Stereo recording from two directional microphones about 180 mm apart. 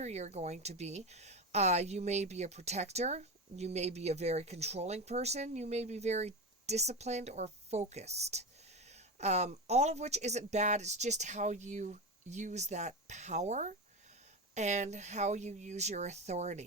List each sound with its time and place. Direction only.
0.0 s a woman's voice: 40° right (ahead or behind)